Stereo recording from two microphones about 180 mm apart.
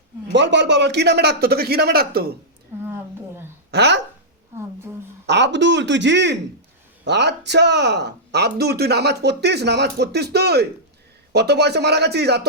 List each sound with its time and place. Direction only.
0.3 s a man's voice: 80° right; by 2.3 s 60° right (ahead or behind)
2.8 s a sound: 15° right (ahead or behind)
3.7 s speech: 70° right (ahead or behind)
5.2 s a man's voice: 70° right (ahead or behind)